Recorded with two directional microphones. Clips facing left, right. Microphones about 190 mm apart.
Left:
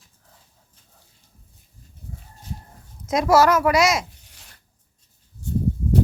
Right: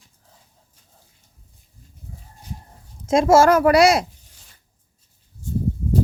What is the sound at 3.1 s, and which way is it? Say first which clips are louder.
Speech: right 3 dB; 25° right (ahead or behind).